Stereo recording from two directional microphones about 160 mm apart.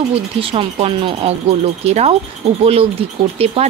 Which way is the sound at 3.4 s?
40° right (ahead or behind).